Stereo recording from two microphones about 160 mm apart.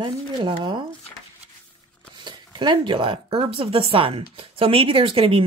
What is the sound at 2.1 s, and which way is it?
Speech, 30° right (ahead or behind).